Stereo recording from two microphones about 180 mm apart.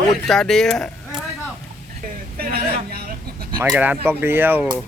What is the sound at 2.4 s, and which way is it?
Speech, 55° right (ahead or behind).